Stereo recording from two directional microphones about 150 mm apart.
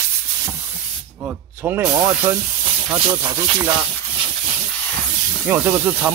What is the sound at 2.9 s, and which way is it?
Speech, 35° right (ahead or behind).